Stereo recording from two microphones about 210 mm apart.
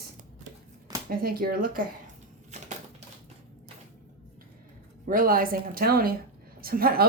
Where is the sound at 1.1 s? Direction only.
45° right (ahead or behind).